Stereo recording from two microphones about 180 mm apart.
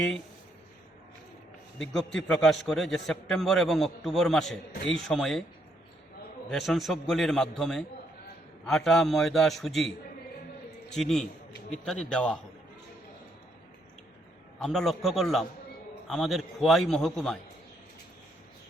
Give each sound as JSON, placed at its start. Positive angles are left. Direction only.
{"t": 1.8, "sound": "a man's voice", "side_deg": 5}
{"t": 6.5, "sound": "a man's voice", "side_deg": 0}
{"t": 14.6, "sound": "a man's voice", "side_deg": 0}